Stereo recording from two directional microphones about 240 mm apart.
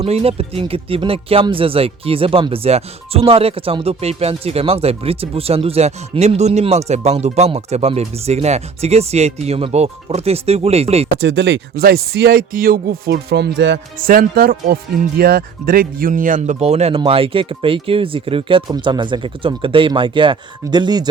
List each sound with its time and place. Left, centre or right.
0.0 s speech: right
11.2 s speech: right; by 21.1 s centre